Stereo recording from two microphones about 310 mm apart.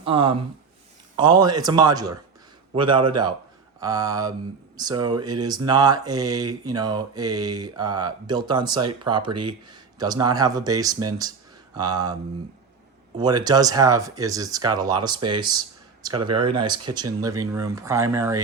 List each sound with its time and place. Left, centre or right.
0.0 s speech: centre
13.1 s speech: centre